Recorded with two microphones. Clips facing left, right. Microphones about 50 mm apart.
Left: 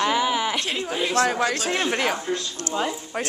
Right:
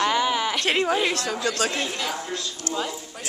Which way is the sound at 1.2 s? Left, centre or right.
Left.